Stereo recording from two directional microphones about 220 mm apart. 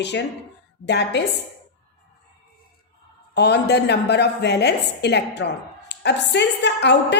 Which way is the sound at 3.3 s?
50° left (ahead or behind).